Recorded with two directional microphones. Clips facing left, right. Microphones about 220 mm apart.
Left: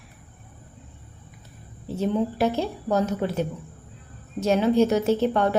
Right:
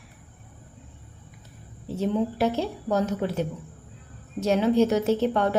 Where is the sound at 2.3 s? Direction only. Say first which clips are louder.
Left 1 dB; 45° left (ahead or behind).